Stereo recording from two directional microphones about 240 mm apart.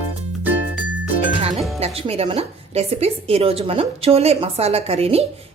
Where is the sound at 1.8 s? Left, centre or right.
Right.